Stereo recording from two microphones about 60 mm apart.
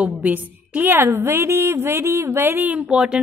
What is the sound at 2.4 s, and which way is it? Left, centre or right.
Speech, right.